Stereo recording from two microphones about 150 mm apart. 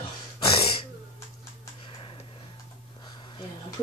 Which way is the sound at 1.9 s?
35° left (ahead or behind).